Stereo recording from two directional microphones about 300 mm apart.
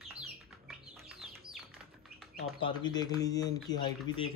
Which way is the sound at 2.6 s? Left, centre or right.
Centre.